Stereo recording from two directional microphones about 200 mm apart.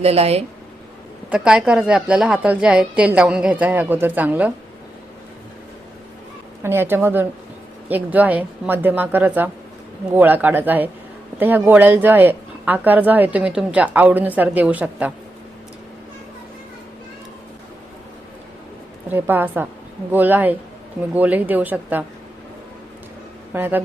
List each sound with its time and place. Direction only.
0.0 s speech: 30° right (ahead or behind)
1.3 s a woman's voice: 5° right (ahead or behind)
6.6 s speech: 10° right (ahead or behind)
19.0 s speech: 10° right (ahead or behind)
23.6 s speech: 10° right (ahead or behind)